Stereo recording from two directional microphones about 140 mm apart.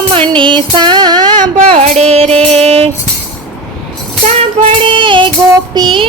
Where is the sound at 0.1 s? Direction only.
35° right (ahead or behind).